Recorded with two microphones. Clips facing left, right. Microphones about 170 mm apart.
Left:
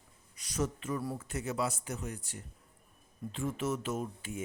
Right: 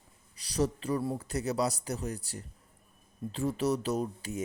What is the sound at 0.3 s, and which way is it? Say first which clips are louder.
Speech: right 4 dB; 35° right (ahead or behind).